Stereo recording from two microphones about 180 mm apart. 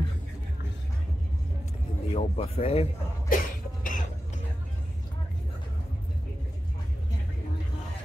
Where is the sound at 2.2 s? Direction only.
35° left (ahead or behind).